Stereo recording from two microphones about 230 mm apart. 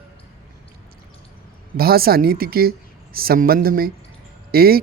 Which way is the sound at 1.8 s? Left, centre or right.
Right.